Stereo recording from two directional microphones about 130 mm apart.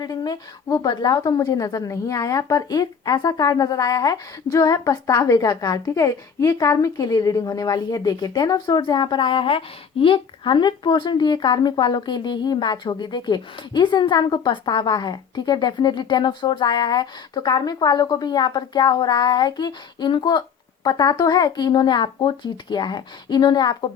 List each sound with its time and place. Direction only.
0.0 s a woman's voice: 30° left (ahead or behind)